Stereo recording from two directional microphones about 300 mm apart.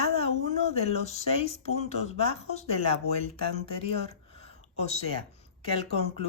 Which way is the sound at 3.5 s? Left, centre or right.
Centre.